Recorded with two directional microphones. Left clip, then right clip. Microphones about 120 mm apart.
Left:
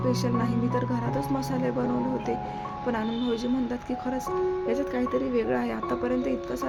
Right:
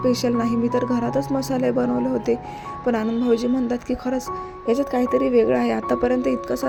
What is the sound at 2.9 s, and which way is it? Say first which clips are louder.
Speech: right 9 dB; 40° right (ahead or behind).